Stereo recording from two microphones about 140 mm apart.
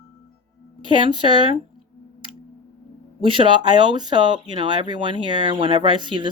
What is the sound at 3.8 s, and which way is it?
Speech, 30° right (ahead or behind).